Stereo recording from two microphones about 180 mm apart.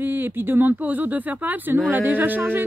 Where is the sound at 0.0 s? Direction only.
10° right (ahead or behind).